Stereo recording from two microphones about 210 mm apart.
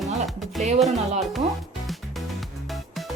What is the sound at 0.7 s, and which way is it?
Speech, centre (ahead or behind).